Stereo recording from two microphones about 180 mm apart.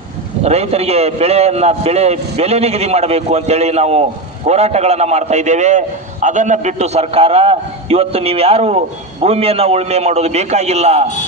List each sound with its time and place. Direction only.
0.4 s a man's voice: 35° right (ahead or behind)